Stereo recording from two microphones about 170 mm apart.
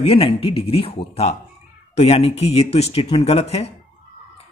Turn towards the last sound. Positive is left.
turn(degrees=35)  # may be behind; listen again after turning